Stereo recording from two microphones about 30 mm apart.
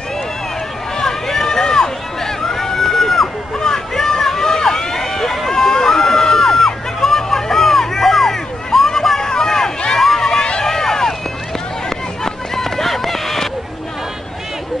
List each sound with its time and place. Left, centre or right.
0.9 s run: centre
1.6 s a sound: left
3.5 s hubbub: centre
5.5 s music: centre
8.7 s a sound: centre
9.3 s run: centre
9.9 s a sound: centre
10.6 s run: centre
12.2 s run: centre